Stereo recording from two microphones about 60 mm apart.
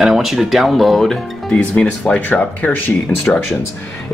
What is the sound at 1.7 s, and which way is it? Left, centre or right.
Speech, centre.